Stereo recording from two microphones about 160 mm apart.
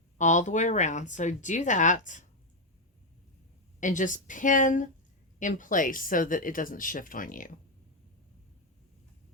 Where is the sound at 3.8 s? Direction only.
50° left (ahead or behind).